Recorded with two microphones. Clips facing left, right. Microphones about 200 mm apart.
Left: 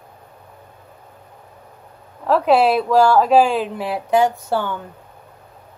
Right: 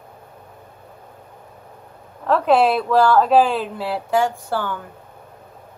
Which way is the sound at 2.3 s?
10° left (ahead or behind).